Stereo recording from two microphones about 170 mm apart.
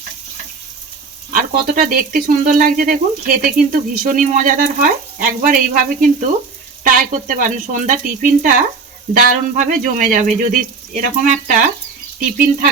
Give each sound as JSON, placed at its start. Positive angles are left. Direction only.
{"t": 1.3, "sound": "speech", "side_deg": -55}